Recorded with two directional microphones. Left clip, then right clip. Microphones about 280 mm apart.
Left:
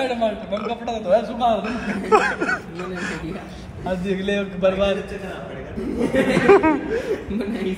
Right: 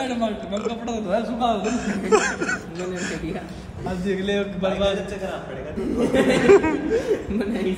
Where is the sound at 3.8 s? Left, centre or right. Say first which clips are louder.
Left 2 dB; left.